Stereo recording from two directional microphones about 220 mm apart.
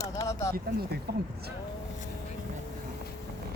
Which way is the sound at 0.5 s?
45° right (ahead or behind).